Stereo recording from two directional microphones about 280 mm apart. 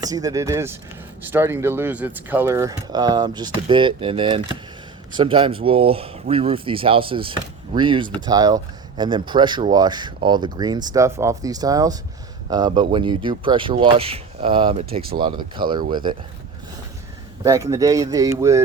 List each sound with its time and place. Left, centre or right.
0.0 s speech: centre
17.4 s speech: centre